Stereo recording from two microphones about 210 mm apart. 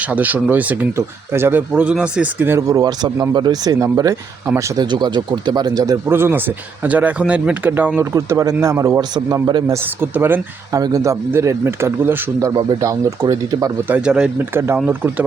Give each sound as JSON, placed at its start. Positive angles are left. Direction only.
{"t": 0.0, "sound": "a man's voice", "side_deg": -5}